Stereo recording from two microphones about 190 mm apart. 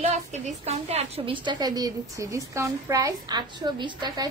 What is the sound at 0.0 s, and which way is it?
A woman's voice, 35° right (ahead or behind).